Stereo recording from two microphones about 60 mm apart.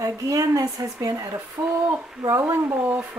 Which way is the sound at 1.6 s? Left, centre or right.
Right.